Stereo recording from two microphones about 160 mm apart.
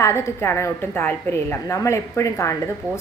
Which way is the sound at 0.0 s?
15° left (ahead or behind).